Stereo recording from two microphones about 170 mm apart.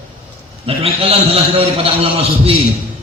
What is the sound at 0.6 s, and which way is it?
A man's voice, 35° right (ahead or behind).